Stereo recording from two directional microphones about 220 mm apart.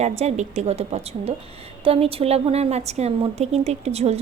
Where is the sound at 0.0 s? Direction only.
30° right (ahead or behind).